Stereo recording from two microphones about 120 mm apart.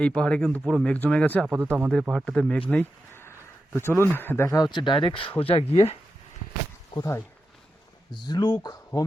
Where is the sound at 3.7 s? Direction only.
20° left (ahead or behind); by 5.8 s 50° left (ahead or behind).